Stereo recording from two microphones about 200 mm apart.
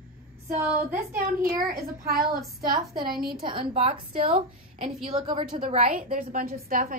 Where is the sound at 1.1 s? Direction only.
45° right (ahead or behind).